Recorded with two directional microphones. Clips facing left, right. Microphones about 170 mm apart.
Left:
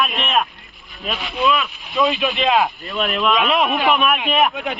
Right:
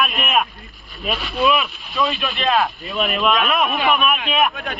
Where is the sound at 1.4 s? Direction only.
15° right (ahead or behind).